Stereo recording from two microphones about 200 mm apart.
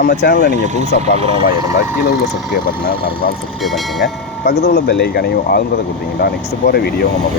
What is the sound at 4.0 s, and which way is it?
Speech, 55° left (ahead or behind).